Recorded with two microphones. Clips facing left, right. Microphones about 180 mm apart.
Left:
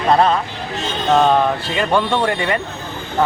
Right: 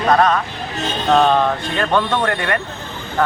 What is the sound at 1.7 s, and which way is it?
Speech, 10° left (ahead or behind).